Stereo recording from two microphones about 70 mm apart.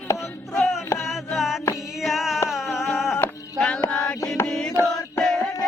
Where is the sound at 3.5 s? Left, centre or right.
Centre.